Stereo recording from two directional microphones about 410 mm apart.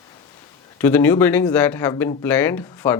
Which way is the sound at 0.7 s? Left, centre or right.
Centre.